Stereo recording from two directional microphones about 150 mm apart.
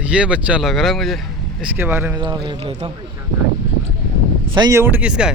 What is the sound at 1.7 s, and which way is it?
Speech, 15° right (ahead or behind).